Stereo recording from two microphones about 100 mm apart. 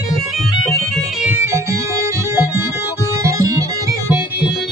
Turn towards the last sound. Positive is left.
turn(degrees=-35)  # may be behind; listen again after turning